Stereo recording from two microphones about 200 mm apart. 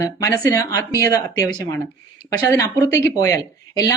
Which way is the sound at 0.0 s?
15° left (ahead or behind).